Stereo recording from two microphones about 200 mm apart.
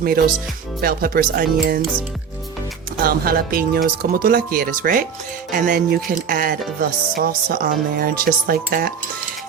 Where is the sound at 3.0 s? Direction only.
50° right (ahead or behind).